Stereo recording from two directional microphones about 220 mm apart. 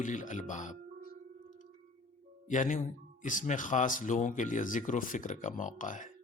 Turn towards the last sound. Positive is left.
turn(degrees=35)  # may be behind; listen again after turning